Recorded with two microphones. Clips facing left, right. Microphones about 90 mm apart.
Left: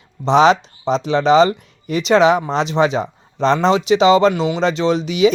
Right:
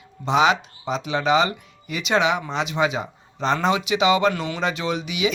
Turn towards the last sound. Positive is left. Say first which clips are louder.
# left 9 dB
turn(degrees=35)  # may be behind; listen again after turning